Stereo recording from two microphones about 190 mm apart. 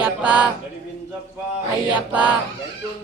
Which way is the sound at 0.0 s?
5° right (ahead or behind).